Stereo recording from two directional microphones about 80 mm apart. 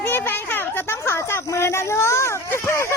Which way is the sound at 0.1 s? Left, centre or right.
Left.